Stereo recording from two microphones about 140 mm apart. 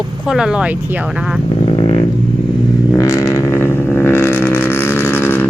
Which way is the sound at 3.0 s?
20° left (ahead or behind).